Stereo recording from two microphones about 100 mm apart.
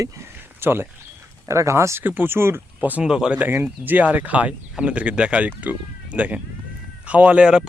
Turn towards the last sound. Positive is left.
turn(degrees=-10)  # may be behind; listen again after turning